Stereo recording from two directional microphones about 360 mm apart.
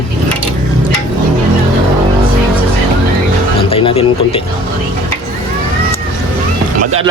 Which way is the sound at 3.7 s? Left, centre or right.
Centre.